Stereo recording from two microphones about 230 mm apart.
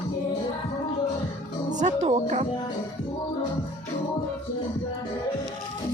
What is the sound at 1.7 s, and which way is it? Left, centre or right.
Music, right.